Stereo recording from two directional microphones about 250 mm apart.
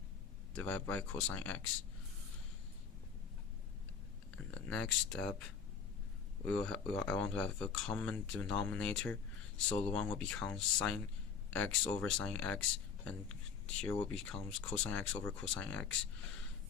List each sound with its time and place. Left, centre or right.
0.5 s speech: centre
4.5 s speech: centre
13.8 s speech: centre